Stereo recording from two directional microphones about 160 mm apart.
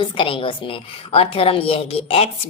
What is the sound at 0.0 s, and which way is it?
A woman's voice, 30° left (ahead or behind).